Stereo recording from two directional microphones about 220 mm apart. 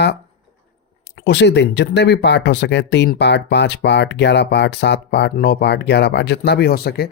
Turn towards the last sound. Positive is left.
turn(degrees=45)  # may be behind; listen again after turning